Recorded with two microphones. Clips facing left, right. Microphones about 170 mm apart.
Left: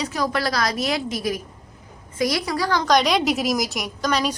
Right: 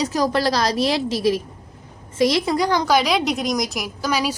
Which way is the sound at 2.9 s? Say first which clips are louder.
Even; 5° right (ahead or behind).